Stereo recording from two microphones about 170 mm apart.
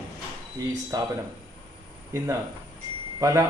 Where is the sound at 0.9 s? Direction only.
20° right (ahead or behind).